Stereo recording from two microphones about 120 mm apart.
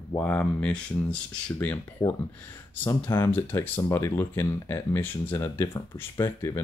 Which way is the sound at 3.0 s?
20° left (ahead or behind).